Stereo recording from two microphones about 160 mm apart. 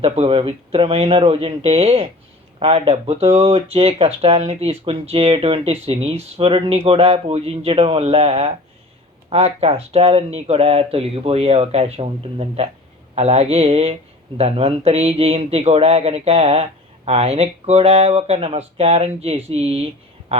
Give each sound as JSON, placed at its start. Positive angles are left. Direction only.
{"t": 0.0, "sound": "speech", "side_deg": -35}